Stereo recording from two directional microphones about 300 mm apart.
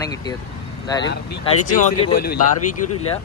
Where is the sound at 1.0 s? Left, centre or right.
Left.